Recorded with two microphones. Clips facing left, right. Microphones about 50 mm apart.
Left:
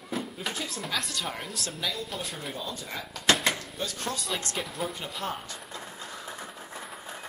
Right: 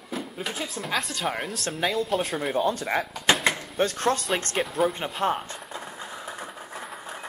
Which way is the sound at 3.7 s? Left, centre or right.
Right.